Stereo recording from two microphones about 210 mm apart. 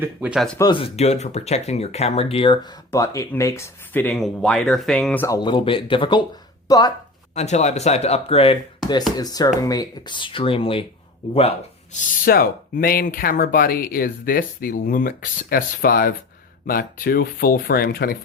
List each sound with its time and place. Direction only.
0.0 s speech: 5° right (ahead or behind)
0.6 s speech: 25° left (ahead or behind)
7.3 s speech: 30° left (ahead or behind)
12.2 s speech: 45° left (ahead or behind)